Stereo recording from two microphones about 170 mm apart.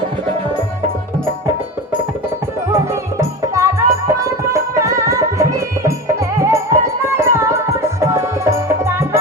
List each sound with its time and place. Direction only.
2.7 s music: 15° right (ahead or behind)